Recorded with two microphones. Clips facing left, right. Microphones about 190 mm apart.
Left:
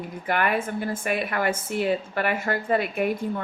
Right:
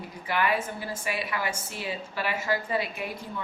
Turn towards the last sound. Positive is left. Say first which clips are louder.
# left 10 dB
turn(degrees=55)  # may be behind; listen again after turning